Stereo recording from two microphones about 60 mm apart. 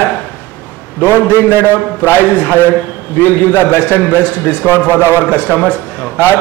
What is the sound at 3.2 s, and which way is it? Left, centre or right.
A man's voice, left.